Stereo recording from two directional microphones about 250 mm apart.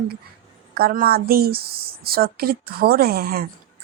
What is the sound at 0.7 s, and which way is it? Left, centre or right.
A woman's voice, right.